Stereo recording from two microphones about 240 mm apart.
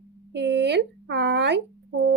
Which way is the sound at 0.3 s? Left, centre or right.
Right.